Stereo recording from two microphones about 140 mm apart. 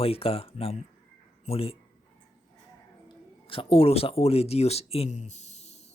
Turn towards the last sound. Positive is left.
turn(degrees=55)  # may be behind; listen again after turning